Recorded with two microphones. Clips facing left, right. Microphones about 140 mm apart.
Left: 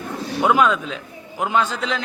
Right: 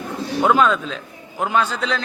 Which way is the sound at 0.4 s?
10° left (ahead or behind).